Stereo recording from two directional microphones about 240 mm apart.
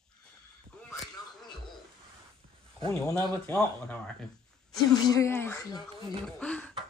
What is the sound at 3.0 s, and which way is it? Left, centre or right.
Speech, centre.